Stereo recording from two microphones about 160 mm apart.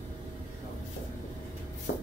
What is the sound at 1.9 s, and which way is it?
Shuffle, 85° left.